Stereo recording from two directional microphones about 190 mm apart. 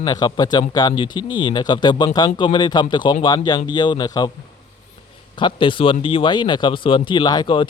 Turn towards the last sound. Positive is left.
turn(degrees=25)  # may be behind; listen again after turning